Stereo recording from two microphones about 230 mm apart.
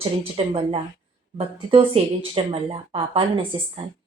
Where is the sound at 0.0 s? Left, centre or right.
Right.